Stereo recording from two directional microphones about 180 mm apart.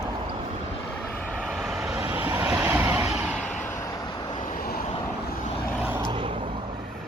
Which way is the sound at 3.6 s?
15° left (ahead or behind).